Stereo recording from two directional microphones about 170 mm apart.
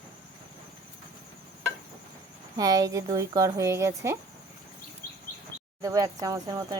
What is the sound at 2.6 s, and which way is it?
Speech, 20° right (ahead or behind).